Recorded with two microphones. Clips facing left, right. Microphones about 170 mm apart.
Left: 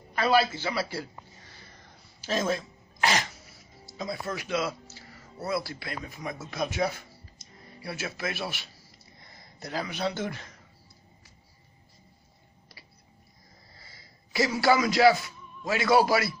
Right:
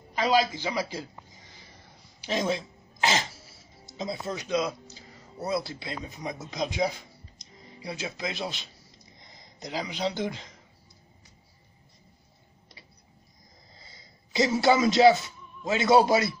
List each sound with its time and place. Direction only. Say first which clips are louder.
0.1 s a sound: even; 15° right (ahead or behind)
2.2 s a man's voice: even; 20° right (ahead or behind)
13.7 s a man's voice: right 1 dB; 20° right (ahead or behind)